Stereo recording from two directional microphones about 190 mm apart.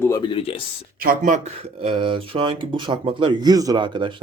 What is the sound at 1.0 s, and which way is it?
Speech, 45° right (ahead or behind).